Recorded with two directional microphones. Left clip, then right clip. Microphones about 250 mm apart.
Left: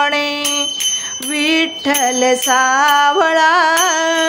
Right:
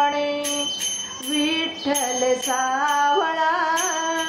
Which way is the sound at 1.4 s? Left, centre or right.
Left.